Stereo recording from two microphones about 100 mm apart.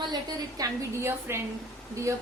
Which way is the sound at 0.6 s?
40° right (ahead or behind).